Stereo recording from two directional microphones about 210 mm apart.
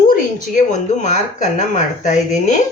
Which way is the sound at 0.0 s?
40° left (ahead or behind).